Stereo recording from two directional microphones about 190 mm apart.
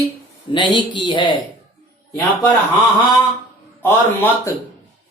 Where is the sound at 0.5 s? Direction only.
25° left (ahead or behind).